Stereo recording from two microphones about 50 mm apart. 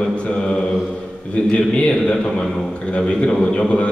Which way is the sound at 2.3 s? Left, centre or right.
Centre.